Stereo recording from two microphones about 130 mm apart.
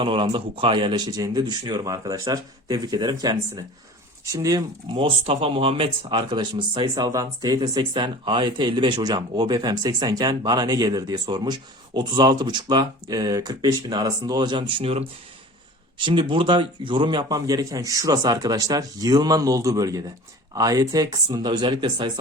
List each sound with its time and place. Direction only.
0.0 s speech: 40° right (ahead or behind)